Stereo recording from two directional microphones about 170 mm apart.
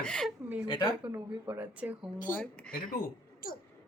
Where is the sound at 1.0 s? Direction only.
10° right (ahead or behind).